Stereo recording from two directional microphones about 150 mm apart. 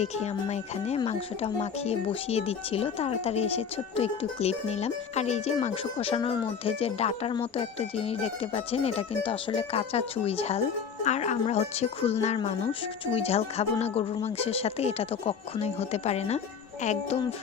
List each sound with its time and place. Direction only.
0.0 s speech: 45° left (ahead or behind)